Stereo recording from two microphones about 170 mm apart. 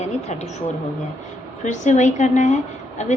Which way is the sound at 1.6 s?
45° left (ahead or behind).